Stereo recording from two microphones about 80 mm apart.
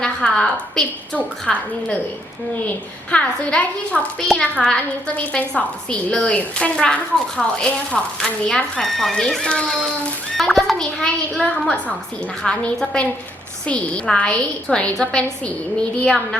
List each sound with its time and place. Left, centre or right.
0.0 s a woman's voice: centre
2.6 s a child's voice: centre
11.4 s speech: centre